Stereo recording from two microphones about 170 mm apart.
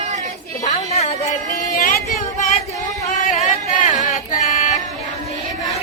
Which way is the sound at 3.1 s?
45° left (ahead or behind).